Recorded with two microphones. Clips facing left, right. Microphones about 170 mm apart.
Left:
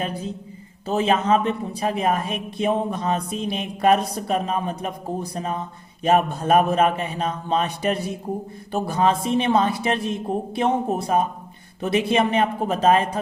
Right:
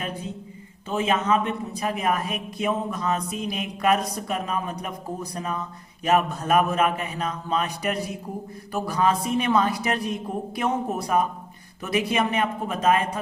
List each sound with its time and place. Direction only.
0.0 s speech: 35° left (ahead or behind)